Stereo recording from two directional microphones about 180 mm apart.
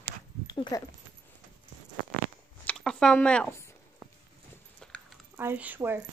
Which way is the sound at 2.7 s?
5° left (ahead or behind).